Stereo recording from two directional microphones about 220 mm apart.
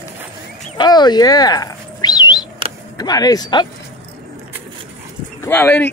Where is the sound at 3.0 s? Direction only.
15° left (ahead or behind).